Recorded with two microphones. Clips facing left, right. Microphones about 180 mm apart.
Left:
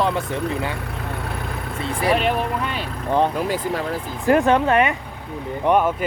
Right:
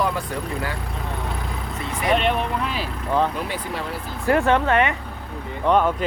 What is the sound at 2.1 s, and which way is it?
Speech, 5° left (ahead or behind).